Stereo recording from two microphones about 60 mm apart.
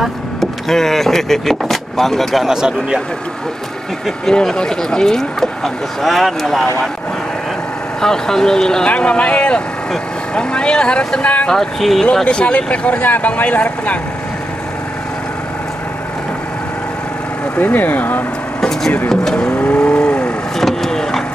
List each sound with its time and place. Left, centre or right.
0.4 s speech: centre
2.4 s speech: centre
4.3 s speech: centre
8.0 s speech: centre
11.5 s speech: centre
12.3 s speech: centre
17.6 s speech: left
18.6 s a sound: centre
19.0 s vehicle: centre
20.5 s vehicle: centre